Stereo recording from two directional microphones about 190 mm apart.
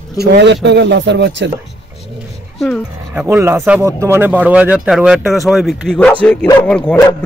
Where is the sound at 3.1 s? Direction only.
10° right (ahead or behind).